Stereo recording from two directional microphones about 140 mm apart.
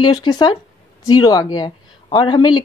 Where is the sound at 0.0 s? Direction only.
30° left (ahead or behind).